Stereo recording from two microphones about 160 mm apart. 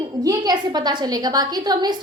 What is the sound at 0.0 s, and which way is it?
A woman's voice, 25° right (ahead or behind).